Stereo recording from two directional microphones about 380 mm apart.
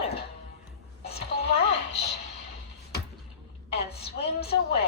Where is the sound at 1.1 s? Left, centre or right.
Centre.